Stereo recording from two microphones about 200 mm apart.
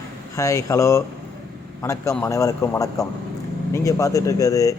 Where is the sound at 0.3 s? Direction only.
15° left (ahead or behind).